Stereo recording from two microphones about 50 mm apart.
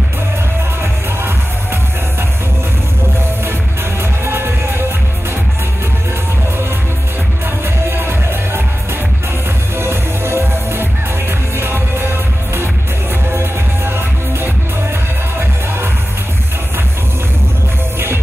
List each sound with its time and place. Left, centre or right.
4.3 s music: right
7.9 s music: right
9.8 s music: right
13.3 s music: right